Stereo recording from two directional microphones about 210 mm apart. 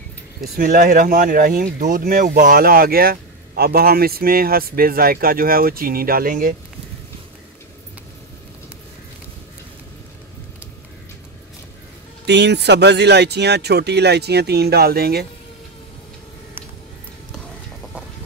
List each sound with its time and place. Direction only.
0.4 s speech: 40° right (ahead or behind)
12.3 s speech: 55° right (ahead or behind)